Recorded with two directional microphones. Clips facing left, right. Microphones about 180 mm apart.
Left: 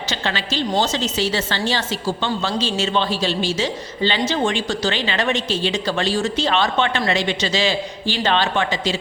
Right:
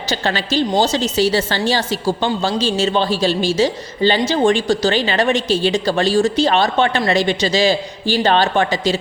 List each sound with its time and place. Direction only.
0.1 s a woman's voice: 40° right (ahead or behind)